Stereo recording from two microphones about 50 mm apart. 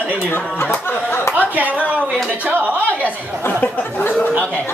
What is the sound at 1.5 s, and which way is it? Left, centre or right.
Speech, right.